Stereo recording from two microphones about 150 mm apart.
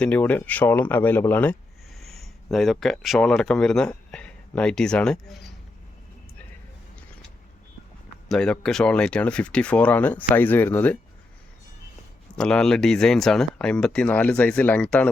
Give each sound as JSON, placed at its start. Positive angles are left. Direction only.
{"t": 0.0, "sound": "speech", "side_deg": 10}
{"t": 2.0, "sound": "speech", "side_deg": 0}
{"t": 8.3, "sound": "speech", "side_deg": 5}
{"t": 12.4, "sound": "speech", "side_deg": 5}